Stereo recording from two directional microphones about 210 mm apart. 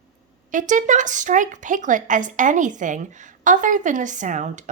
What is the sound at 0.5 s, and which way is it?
A woman's voice, 35° right (ahead or behind).